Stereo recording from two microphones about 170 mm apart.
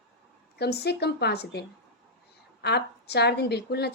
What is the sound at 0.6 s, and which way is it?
A woman's voice, 70° left (ahead or behind).